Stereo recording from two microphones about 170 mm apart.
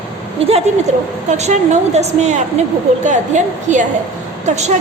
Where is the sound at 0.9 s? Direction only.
45° right (ahead or behind).